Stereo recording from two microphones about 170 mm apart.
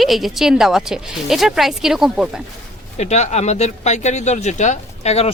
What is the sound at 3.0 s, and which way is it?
Speech, 40° left (ahead or behind).